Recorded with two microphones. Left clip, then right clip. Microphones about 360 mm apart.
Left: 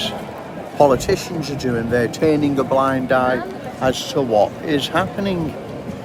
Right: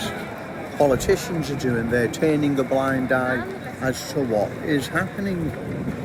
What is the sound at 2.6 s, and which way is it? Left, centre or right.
Speech, centre.